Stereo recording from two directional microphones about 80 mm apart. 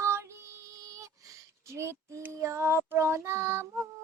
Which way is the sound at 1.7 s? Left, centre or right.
Right.